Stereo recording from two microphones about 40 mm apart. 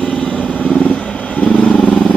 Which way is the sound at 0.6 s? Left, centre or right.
Left.